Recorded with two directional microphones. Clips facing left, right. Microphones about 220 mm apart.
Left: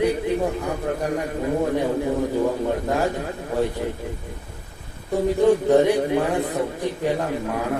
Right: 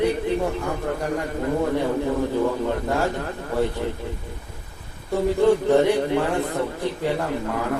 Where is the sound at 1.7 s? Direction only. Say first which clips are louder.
Even; 15° left (ahead or behind).